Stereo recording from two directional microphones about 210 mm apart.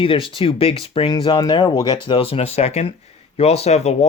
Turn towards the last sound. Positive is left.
turn(degrees=30)  # may be behind; listen again after turning